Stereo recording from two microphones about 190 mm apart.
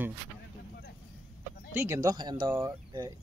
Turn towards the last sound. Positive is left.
turn(degrees=-15)  # may be behind; listen again after turning